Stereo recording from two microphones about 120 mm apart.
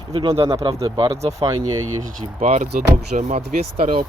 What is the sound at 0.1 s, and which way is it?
Speech, 55° right (ahead or behind).